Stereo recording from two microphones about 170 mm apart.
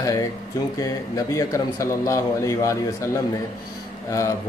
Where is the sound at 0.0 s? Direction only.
20° left (ahead or behind).